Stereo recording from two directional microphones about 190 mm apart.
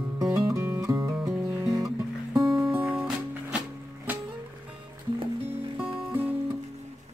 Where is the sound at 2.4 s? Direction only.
Centre (ahead or behind).